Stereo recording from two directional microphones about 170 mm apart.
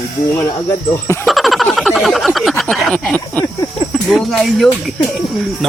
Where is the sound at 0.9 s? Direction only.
15° left (ahead or behind).